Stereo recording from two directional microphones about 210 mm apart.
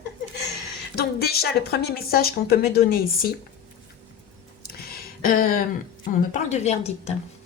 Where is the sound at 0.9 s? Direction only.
50° left (ahead or behind).